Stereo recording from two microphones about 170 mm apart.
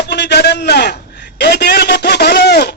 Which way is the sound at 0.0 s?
80° left.